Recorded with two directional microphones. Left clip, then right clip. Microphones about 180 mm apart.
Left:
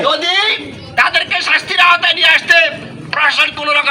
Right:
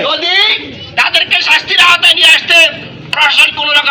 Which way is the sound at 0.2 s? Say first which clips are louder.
Right 4 dB; 20° left (ahead or behind).